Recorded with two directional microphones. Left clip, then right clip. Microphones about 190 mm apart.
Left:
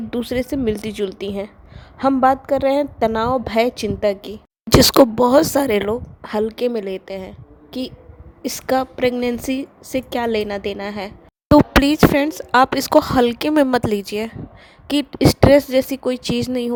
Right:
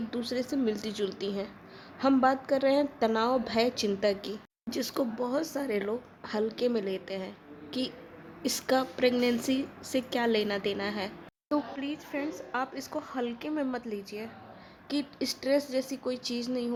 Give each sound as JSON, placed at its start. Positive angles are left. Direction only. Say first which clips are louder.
{"t": 0.1, "sound": "a woman's voice", "louder": "left 12 dB", "side_deg": 45}
{"t": 4.9, "sound": "a woman's voice", "louder": "left 15 dB", "side_deg": 55}
{"t": 9.1, "sound": "speech", "louder": "left 6 dB", "side_deg": 25}
{"t": 9.4, "sound": "a woman's voice", "louder": "left 7 dB", "side_deg": 40}
{"t": 11.5, "sound": "speech", "louder": "left 19 dB", "side_deg": 65}